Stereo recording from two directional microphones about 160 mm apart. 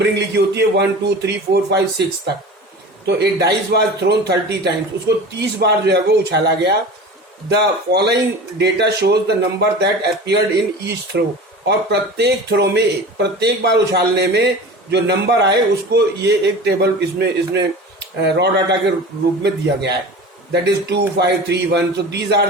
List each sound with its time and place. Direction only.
0.0 s a man's voice: 90° right
11.6 s a man's voice: 90° right